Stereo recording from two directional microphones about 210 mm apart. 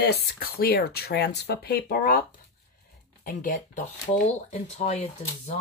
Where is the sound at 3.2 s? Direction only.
40° left (ahead or behind).